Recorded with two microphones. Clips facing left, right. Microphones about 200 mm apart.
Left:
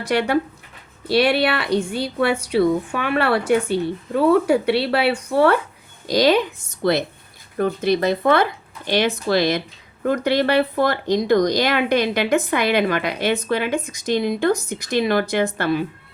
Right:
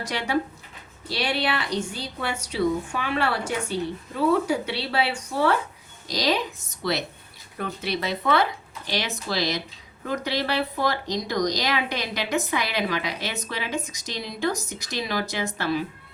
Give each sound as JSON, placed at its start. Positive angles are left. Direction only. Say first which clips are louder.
{"t": 0.1, "sound": "speech", "louder": "left 8 dB", "side_deg": 60}
{"t": 7.6, "sound": "speech", "louder": "left 10 dB", "side_deg": 45}